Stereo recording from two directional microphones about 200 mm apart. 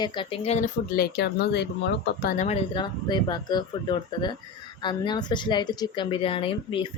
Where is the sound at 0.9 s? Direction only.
50° left (ahead or behind).